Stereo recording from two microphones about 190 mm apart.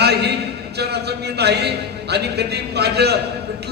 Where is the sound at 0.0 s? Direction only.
60° right (ahead or behind).